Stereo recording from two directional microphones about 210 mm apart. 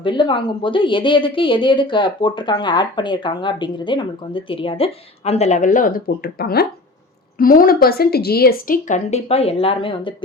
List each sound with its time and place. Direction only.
0.0 s a woman's voice: 20° left (ahead or behind)